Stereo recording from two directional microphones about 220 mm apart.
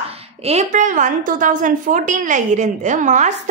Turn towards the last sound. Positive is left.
turn(degrees=-35)  # may be behind; listen again after turning